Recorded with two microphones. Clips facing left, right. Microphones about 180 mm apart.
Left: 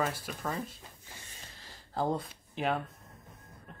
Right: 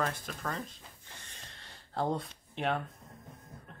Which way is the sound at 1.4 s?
Centre (ahead or behind).